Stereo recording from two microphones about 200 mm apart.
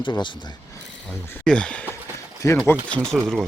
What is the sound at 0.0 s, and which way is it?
Speech, 25° left (ahead or behind).